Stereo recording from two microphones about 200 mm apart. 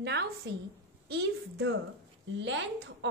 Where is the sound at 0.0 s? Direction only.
60° right (ahead or behind).